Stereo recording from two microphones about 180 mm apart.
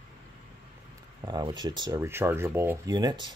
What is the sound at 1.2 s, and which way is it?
Speech, 25° right (ahead or behind).